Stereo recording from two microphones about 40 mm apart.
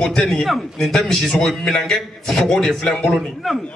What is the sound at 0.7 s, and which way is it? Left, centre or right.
A man's voice, centre.